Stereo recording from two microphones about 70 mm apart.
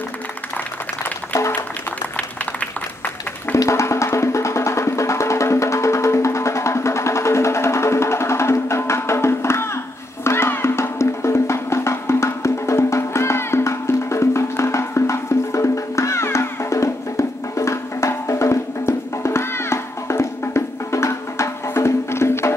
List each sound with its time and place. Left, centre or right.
3.5 s music: left